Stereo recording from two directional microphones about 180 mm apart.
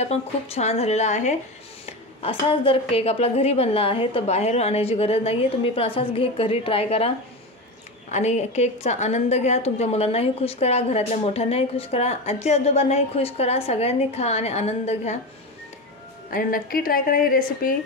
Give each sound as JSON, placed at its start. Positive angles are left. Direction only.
{"t": 0.0, "sound": "a woman's voice", "side_deg": 35}
{"t": 2.2, "sound": "a woman's voice", "side_deg": 30}
{"t": 8.1, "sound": "a woman's voice", "side_deg": 40}
{"t": 16.3, "sound": "a woman's voice", "side_deg": 50}